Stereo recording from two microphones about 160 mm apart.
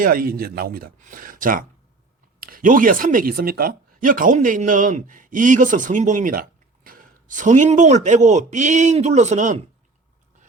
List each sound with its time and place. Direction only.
0.0 s speech: 65° right (ahead or behind)